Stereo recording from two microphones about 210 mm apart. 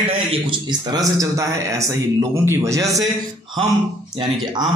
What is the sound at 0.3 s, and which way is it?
Speech, 20° right (ahead or behind).